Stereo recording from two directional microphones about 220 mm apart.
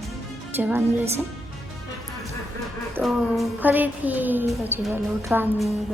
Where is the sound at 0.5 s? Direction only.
10° right (ahead or behind).